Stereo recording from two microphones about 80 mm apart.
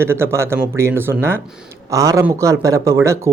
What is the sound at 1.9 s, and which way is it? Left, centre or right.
Speech, right.